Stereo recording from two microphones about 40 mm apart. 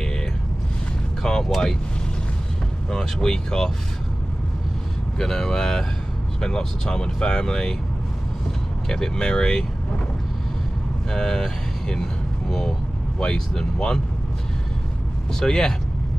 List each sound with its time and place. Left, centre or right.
1.2 s speech: centre
2.9 s speech: centre
5.2 s speech: centre
8.8 s speech: centre
11.1 s speech: centre
15.4 s speech: centre